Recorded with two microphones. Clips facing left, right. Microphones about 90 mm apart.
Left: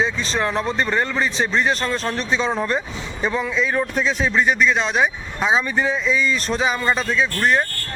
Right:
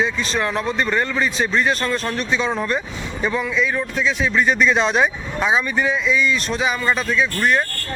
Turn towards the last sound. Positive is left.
turn(degrees=25)  # may be behind; listen again after turning